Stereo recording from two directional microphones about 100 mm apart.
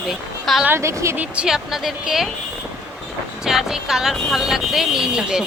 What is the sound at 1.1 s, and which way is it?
Speech, 15° right (ahead or behind).